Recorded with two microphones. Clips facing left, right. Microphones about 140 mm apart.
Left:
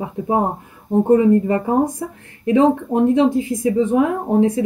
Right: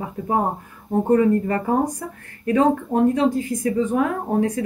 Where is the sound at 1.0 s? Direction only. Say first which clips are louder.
Left 3 dB; 20° left (ahead or behind).